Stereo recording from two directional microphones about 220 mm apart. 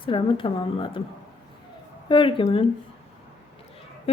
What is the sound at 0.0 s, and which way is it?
A woman's voice, 25° left (ahead or behind).